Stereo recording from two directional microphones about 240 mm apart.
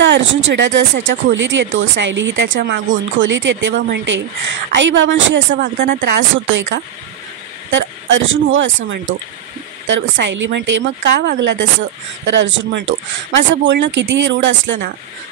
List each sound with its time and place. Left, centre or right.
0.0 s speech: right